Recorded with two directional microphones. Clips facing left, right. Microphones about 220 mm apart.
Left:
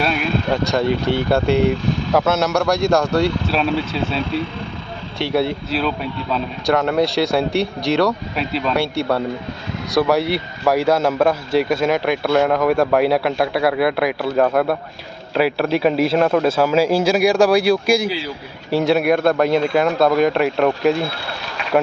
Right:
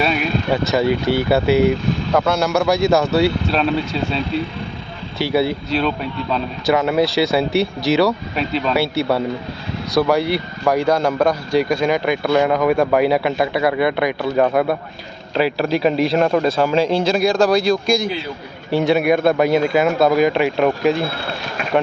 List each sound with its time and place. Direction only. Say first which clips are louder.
0.0 s speech: right 1 dB; centre (ahead or behind)
21.6 s run: right 1 dB; 50° right (ahead or behind)